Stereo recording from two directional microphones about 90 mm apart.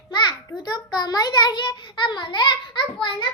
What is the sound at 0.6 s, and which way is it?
A child's voice, 50° left (ahead or behind).